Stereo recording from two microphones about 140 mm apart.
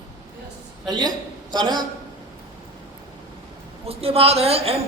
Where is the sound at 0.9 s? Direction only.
30° right (ahead or behind).